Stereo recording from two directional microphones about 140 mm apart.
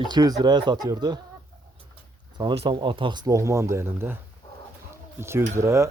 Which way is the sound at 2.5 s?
40° right (ahead or behind).